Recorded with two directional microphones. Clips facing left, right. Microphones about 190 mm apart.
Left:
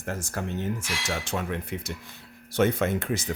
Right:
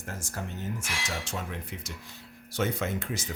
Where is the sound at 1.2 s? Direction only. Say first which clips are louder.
Left 6 dB; 65° left (ahead or behind).